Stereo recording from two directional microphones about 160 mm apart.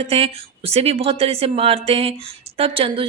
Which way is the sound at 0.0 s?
40° right (ahead or behind).